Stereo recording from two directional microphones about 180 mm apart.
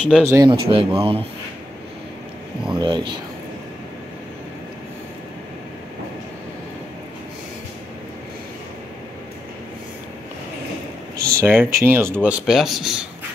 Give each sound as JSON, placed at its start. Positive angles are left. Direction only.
{"t": 0.0, "sound": "speech", "side_deg": 0}
{"t": 0.3, "sound": "speech", "side_deg": -25}
{"t": 2.7, "sound": "speech", "side_deg": -25}
{"t": 11.3, "sound": "speech", "side_deg": -10}